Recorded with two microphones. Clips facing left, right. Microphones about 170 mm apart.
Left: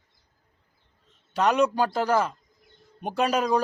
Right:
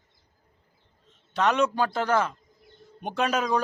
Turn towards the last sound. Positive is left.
turn(degrees=5)  # may be behind; listen again after turning